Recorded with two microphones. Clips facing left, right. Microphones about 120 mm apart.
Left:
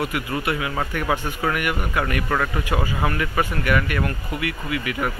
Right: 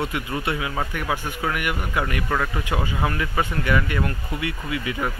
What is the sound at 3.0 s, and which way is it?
Speech, 10° right (ahead or behind).